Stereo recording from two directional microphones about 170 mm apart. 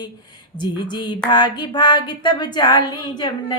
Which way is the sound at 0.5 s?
25° left (ahead or behind).